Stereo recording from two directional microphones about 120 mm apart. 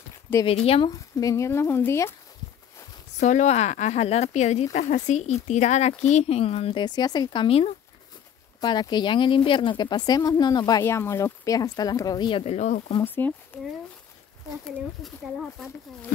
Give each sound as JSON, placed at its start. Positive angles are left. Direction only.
{"t": 0.3, "sound": "speech", "side_deg": 20}
{"t": 0.8, "sound": "speech", "side_deg": 30}
{"t": 3.2, "sound": "speech", "side_deg": 90}
{"t": 4.7, "sound": "speech", "side_deg": 90}
{"t": 6.8, "sound": "speech", "side_deg": 35}
{"t": 7.4, "sound": "speech", "side_deg": 55}
{"t": 8.5, "sound": "speech", "side_deg": 35}
{"t": 10.8, "sound": "speech", "side_deg": 20}
{"t": 12.4, "sound": "speech", "side_deg": 80}
{"t": 13.0, "sound": "speech", "side_deg": 15}
{"t": 15.0, "sound": "speech", "side_deg": 0}